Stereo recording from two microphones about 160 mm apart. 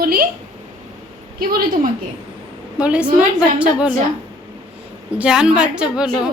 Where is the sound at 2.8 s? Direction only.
5° right (ahead or behind).